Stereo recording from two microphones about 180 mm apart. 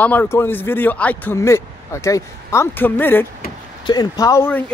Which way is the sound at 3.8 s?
25° left (ahead or behind).